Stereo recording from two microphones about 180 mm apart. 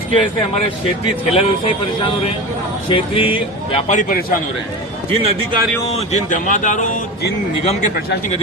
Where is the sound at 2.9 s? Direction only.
30° left (ahead or behind).